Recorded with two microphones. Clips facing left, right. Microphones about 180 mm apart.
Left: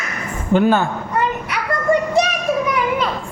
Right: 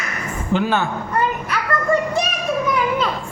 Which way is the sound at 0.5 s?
50° left (ahead or behind).